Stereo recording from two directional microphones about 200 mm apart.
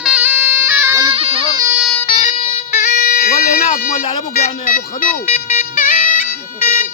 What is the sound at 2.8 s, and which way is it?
Music, 40° left (ahead or behind).